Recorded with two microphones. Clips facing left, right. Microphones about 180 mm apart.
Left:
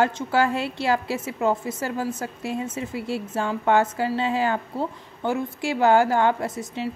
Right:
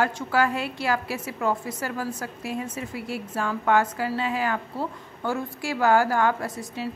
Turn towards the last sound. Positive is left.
turn(degrees=20)  # may be behind; listen again after turning